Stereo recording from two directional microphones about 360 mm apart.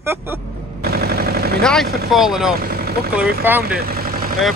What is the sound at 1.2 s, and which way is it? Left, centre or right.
Vehicle, right.